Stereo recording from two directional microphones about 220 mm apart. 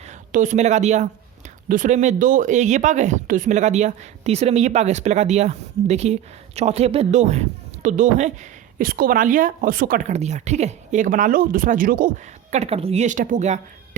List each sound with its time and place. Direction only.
0.3 s speech: 35° right (ahead or behind)